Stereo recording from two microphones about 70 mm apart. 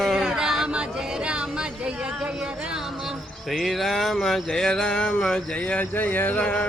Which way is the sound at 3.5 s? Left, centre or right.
Centre.